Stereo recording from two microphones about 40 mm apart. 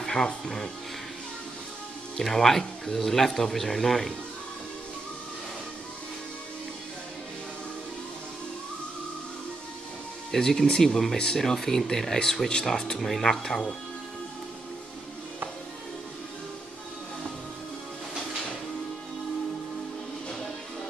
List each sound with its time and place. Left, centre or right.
0.0 s music: centre
2.1 s speech: centre
10.3 s speech: centre